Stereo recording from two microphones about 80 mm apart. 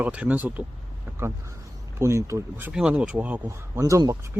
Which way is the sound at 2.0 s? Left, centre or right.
Right.